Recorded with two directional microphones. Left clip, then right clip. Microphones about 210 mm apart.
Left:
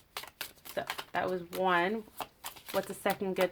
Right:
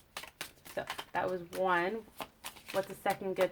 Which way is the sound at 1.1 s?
35° left (ahead or behind).